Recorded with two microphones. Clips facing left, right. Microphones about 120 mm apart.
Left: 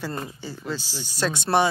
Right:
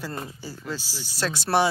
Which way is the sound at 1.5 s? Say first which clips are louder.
Left 1 dB; 5° left (ahead or behind).